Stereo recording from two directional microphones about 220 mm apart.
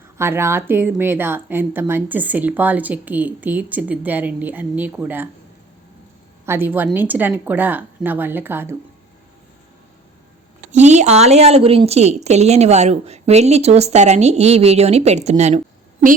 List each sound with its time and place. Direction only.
0.2 s a woman's voice: 10° right (ahead or behind)
6.4 s a woman's voice: 10° right (ahead or behind)
10.7 s a woman's voice: 30° right (ahead or behind)